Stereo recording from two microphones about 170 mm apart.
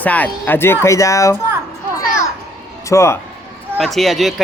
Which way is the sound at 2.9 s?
15° left (ahead or behind).